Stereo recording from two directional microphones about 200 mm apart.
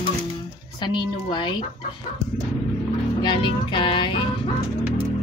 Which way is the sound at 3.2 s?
25° left (ahead or behind).